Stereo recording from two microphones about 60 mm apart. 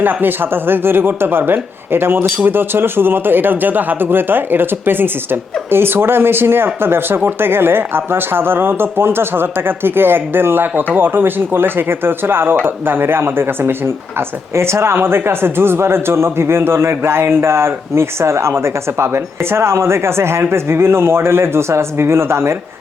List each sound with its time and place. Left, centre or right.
0.0 s speech: right